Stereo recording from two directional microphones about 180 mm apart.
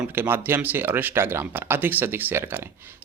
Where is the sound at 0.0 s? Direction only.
10° right (ahead or behind).